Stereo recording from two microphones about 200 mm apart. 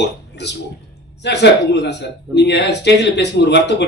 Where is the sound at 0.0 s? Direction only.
60° left (ahead or behind).